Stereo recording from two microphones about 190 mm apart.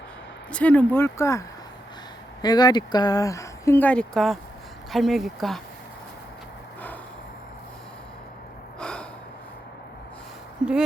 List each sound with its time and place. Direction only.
0.5 s speech: 5° left (ahead or behind)
8.8 s gasp: 5° left (ahead or behind)